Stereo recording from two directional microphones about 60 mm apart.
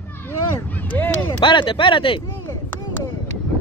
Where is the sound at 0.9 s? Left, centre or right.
Left.